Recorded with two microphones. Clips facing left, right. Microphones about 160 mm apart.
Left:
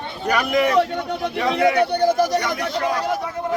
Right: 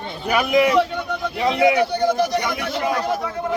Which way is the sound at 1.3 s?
20° right (ahead or behind).